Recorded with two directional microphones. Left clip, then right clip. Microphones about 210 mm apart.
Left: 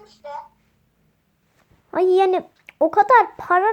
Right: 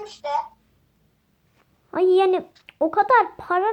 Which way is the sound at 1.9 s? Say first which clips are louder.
Left 1 dB; 15° left (ahead or behind).